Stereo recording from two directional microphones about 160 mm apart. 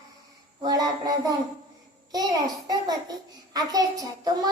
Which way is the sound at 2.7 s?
25° right (ahead or behind).